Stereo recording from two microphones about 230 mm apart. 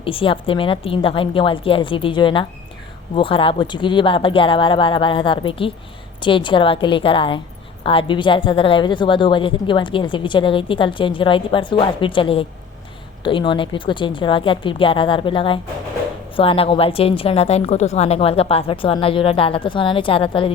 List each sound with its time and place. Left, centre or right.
0.0 s a woman's voice: left